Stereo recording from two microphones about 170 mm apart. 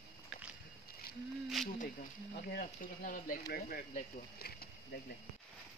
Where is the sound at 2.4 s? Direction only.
55° left (ahead or behind).